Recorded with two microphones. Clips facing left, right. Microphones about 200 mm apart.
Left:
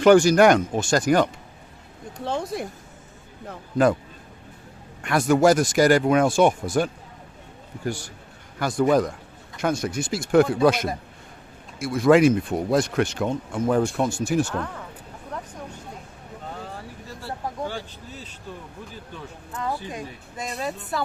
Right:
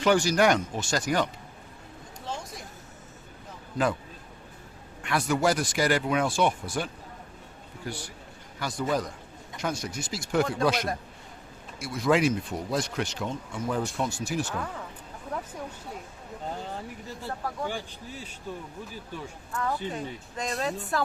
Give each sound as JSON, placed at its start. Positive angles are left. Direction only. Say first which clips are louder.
{"t": 0.0, "sound": "speech", "louder": "left 8 dB", "side_deg": 50}
{"t": 2.1, "sound": "a man's voice", "louder": "left 11 dB", "side_deg": 60}
{"t": 3.5, "sound": "a sound", "louder": "left 8 dB", "side_deg": 50}
{"t": 5.0, "sound": "speech", "louder": "left 8 dB", "side_deg": 45}
{"t": 8.5, "sound": "a man's voice", "louder": "left 9 dB", "side_deg": 55}
{"t": 15.3, "sound": "a sound", "louder": "even", "side_deg": -5}
{"t": 17.7, "sound": "speech", "louder": "left 1 dB", "side_deg": -15}
{"t": 19.5, "sound": "speech", "louder": "left 1 dB", "side_deg": 20}